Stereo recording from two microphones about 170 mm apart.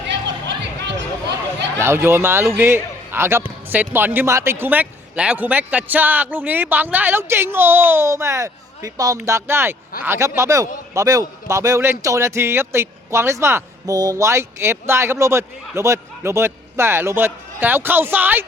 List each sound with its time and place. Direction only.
0.1 s chatter: 90° right
1.8 s a man's voice: 15° right (ahead or behind)